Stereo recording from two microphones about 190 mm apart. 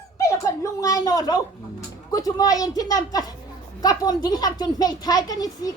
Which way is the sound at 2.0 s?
20° left (ahead or behind).